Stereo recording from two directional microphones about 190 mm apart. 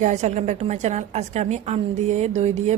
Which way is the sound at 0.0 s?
40° right (ahead or behind).